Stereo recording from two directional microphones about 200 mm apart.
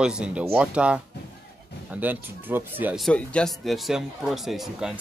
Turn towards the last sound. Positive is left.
turn(degrees=0)  # may be behind; listen again after turning